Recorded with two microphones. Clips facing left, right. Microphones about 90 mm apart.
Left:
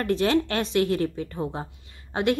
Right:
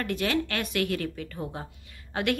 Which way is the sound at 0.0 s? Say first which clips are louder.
Left 5 dB; 30° left (ahead or behind).